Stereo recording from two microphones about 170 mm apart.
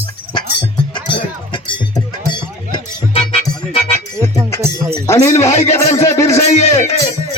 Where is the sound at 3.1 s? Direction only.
35° left (ahead or behind).